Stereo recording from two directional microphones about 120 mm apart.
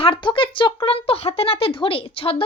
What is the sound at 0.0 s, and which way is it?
A woman's voice, 40° left (ahead or behind).